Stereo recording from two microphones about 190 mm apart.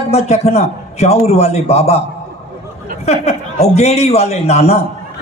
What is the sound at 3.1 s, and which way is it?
A man's voice, 35° left (ahead or behind).